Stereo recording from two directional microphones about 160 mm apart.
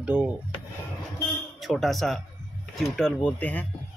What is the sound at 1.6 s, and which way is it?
Speech, centre (ahead or behind).